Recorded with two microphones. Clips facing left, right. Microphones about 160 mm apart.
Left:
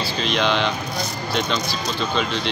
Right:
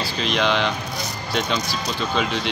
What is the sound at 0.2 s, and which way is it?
Speech, 5° right (ahead or behind).